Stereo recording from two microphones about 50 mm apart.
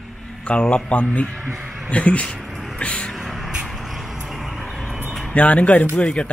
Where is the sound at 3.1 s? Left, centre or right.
Centre.